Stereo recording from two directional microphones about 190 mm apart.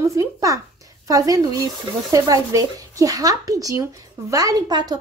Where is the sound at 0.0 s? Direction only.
15° right (ahead or behind).